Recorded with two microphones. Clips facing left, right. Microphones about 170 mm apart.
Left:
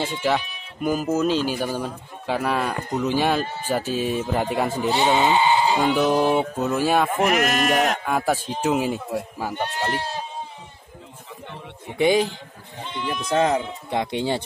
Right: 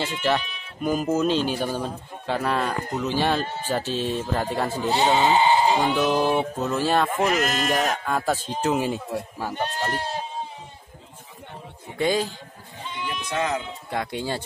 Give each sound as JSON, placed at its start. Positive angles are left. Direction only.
{"t": 0.0, "sound": "a man's voice", "side_deg": 10}
{"t": 5.3, "sound": "speech", "side_deg": -35}
{"t": 5.9, "sound": "a man's voice", "side_deg": 15}
{"t": 7.4, "sound": "speech", "side_deg": 60}
{"t": 8.0, "sound": "a man's voice", "side_deg": 10}
{"t": 12.0, "sound": "a man's voice", "side_deg": 15}
{"t": 13.1, "sound": "speech", "side_deg": 40}